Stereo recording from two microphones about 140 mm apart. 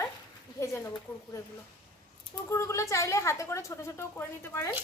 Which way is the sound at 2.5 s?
20° left (ahead or behind).